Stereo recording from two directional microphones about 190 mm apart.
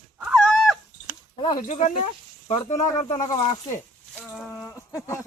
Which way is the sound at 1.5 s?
40° left (ahead or behind).